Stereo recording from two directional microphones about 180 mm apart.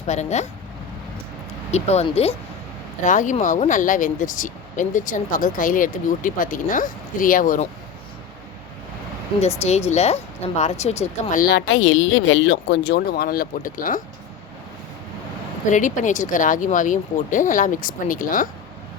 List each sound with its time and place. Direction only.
0.1 s speech: 40° left (ahead or behind)
1.7 s speech: 35° left (ahead or behind)
9.6 s speech: 40° left (ahead or behind)
15.7 s speech: 45° left (ahead or behind)